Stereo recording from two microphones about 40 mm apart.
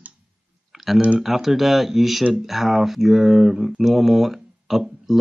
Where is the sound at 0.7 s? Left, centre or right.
Centre.